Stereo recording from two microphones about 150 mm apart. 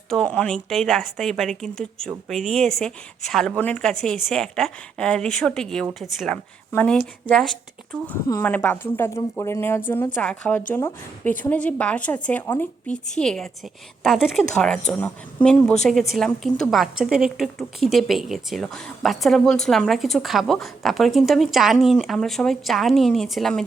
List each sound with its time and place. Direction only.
0.1 s a woman's voice: 5° left (ahead or behind)
8.3 s a woman's voice: 15° left (ahead or behind)